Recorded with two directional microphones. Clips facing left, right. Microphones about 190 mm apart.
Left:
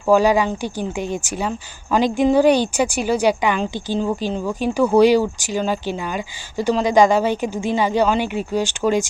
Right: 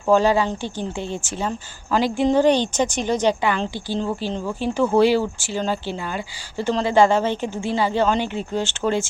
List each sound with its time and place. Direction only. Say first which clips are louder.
0.1 s speech: left 2 dB; 10° left (ahead or behind)